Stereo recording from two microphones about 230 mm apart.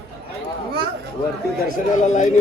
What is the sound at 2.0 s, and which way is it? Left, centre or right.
Speech, left.